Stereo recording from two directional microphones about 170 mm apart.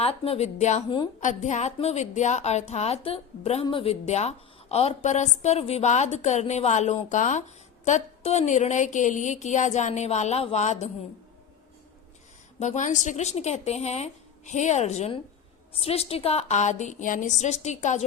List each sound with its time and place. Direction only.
0.0 s a woman's voice: 35° left (ahead or behind)
12.5 s a woman's voice: 45° left (ahead or behind)